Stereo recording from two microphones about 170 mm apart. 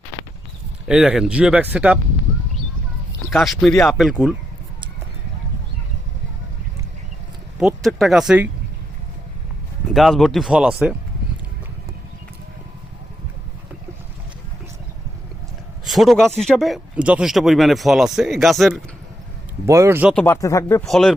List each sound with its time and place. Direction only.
0.9 s speech: 5° right (ahead or behind)
3.3 s a man's voice: centre (ahead or behind)
7.6 s a man's voice: centre (ahead or behind)
9.9 s a man's voice: centre (ahead or behind)
15.8 s a man's voice: centre (ahead or behind)
19.6 s speech: 15° right (ahead or behind)
20.2 s speech: 15° left (ahead or behind)
20.8 s a man's voice: centre (ahead or behind)